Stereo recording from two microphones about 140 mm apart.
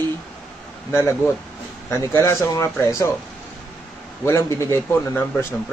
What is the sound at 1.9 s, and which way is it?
A man's voice, 20° left (ahead or behind).